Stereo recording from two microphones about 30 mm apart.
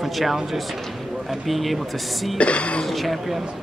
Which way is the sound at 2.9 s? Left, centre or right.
Centre.